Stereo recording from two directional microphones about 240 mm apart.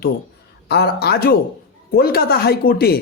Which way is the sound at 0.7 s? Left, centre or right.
Left.